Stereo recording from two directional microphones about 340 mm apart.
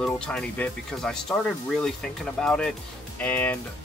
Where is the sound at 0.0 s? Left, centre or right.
Centre.